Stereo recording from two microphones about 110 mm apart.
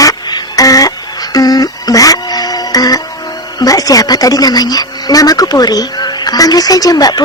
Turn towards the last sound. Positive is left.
turn(degrees=35)  # may be behind; listen again after turning